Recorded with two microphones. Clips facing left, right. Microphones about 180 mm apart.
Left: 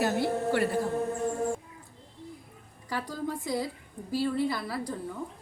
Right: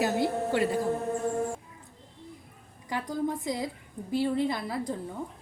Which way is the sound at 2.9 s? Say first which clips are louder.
Right 3 dB; 20° right (ahead or behind).